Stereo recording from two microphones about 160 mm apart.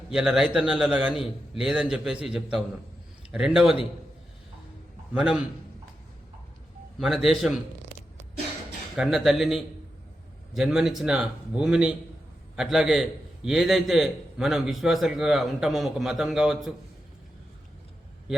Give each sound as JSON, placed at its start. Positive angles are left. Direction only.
{"t": 0.1, "sound": "a man's voice", "side_deg": -5}
{"t": 5.1, "sound": "a man's voice", "side_deg": -5}
{"t": 7.0, "sound": "a man's voice", "side_deg": 0}
{"t": 9.0, "sound": "a man's voice", "side_deg": 0}